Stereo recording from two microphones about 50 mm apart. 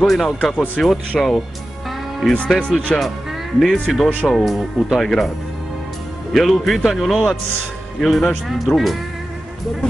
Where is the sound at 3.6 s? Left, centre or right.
Centre.